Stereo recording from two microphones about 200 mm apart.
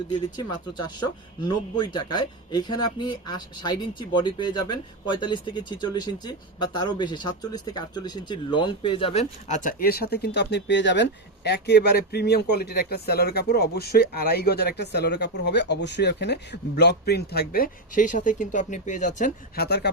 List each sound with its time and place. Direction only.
0.3 s speech: 20° left (ahead or behind); by 19.6 s 40° left (ahead or behind)
19.6 s speech: 55° left (ahead or behind)